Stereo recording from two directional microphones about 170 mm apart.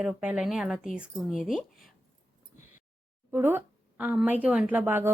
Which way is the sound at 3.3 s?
15° right (ahead or behind).